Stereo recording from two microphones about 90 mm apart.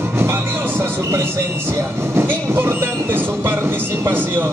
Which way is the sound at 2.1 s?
25° right (ahead or behind).